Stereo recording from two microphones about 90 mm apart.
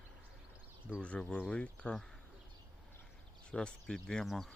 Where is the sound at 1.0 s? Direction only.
15° left (ahead or behind).